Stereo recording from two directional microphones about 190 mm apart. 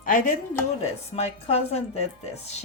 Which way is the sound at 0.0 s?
45° left (ahead or behind).